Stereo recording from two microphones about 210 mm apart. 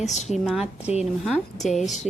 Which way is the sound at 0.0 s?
35° left (ahead or behind).